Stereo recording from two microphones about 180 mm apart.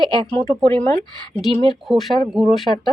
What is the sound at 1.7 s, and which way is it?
Speech, centre (ahead or behind).